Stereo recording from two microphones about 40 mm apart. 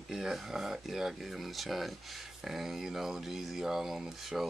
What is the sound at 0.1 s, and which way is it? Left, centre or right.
Speech, centre.